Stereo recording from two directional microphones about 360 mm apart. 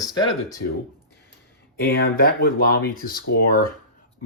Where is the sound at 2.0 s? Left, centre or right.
Left.